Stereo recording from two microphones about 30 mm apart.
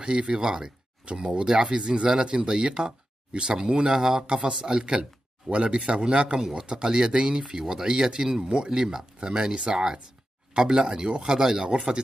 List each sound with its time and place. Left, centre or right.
0.0 s speech: right
1.0 s speech: right
8.6 s speech: centre
11.2 s speech: centre